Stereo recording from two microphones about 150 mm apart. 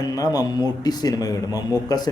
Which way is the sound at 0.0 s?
25° left (ahead or behind).